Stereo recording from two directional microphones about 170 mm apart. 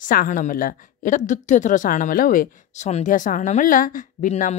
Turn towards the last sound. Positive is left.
turn(degrees=45)  # may be behind; listen again after turning